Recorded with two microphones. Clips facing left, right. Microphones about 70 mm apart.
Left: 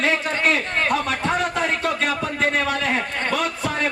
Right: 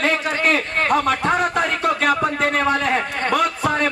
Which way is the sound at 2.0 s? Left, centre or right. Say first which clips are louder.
Right 4 dB; right.